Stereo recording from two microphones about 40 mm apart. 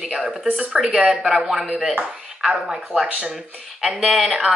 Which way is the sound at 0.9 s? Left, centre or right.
Centre.